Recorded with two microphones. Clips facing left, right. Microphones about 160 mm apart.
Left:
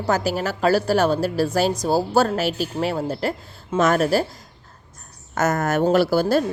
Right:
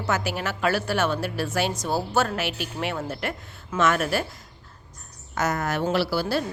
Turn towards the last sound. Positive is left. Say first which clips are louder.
# left 7 dB
turn(degrees=45)  # may be behind; listen again after turning